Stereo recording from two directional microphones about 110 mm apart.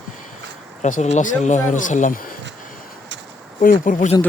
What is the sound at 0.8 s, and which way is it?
Speech, 90° left.